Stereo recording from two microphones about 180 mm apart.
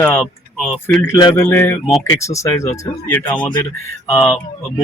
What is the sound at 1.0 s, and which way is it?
Speech, 15° left (ahead or behind).